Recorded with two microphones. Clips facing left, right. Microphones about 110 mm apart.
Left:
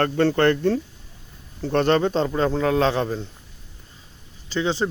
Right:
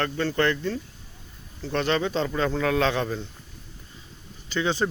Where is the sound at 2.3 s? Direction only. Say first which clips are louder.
Left 4 dB; 30° left (ahead or behind).